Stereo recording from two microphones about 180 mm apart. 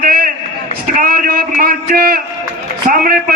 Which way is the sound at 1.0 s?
50° right (ahead or behind).